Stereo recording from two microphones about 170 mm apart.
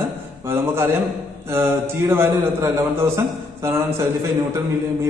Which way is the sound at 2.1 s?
15° right (ahead or behind).